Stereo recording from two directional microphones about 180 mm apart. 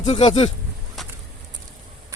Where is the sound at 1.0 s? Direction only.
Centre (ahead or behind).